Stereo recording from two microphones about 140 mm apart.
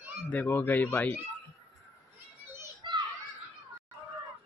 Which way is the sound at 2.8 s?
35° right (ahead or behind).